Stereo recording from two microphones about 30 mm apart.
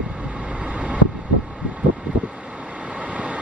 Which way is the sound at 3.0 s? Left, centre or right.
Right.